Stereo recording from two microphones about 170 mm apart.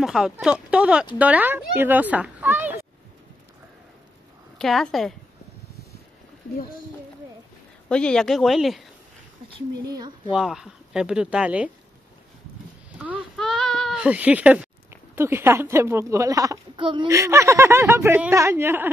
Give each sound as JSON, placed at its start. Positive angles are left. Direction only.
{"t": 0.0, "sound": "speech", "side_deg": -5}
{"t": 4.6, "sound": "speech", "side_deg": 0}
{"t": 7.9, "sound": "speech", "side_deg": 5}
{"t": 9.8, "sound": "speech", "side_deg": -25}
{"t": 10.3, "sound": "speech", "side_deg": -5}
{"t": 13.4, "sound": "speech", "side_deg": 0}
{"t": 17.2, "sound": "speech", "side_deg": -15}